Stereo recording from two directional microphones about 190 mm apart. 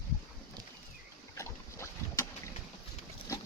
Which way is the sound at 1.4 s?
15° left (ahead or behind).